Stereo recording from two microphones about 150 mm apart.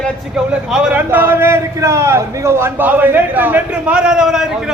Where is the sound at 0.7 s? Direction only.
5° right (ahead or behind).